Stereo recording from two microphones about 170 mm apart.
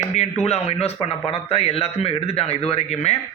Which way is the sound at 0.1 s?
40° left (ahead or behind).